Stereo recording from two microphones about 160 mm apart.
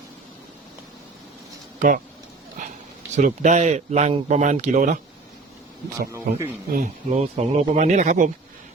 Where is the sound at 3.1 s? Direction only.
50° right (ahead or behind).